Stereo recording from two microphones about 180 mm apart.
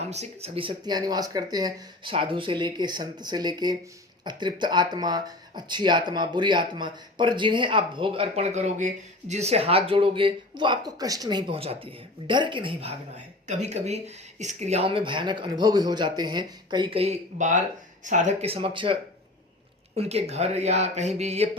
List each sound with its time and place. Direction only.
0.1 s speech: 35° right (ahead or behind)
20.0 s speech: 35° right (ahead or behind)